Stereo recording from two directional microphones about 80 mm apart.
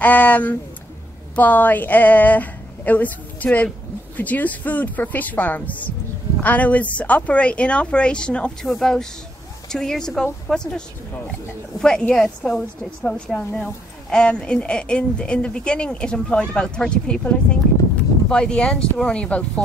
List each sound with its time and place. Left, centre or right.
0.0 s a woman's voice: centre
11.8 s speech: centre